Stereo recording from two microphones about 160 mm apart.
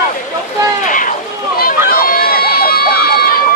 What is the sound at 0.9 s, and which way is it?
Run, 55° left (ahead or behind).